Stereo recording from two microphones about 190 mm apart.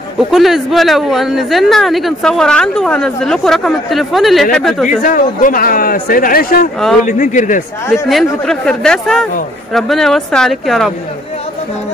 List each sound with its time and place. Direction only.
0.3 s speech: centre (ahead or behind)
5.0 s speech: 45° left (ahead or behind)
8.1 s speech: centre (ahead or behind)